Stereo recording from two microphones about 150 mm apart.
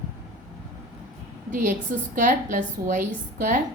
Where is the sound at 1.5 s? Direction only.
60° right (ahead or behind).